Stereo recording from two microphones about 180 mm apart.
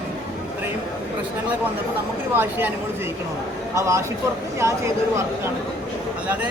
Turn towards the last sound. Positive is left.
turn(degrees=-15)  # may be behind; listen again after turning